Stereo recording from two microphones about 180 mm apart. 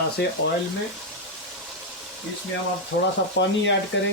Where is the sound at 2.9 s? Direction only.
90° left.